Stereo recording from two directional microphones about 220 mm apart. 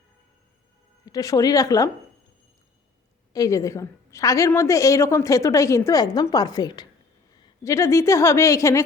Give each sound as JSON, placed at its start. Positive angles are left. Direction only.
{"t": 1.0, "sound": "a woman's voice", "side_deg": 15}
{"t": 3.3, "sound": "a woman's voice", "side_deg": 15}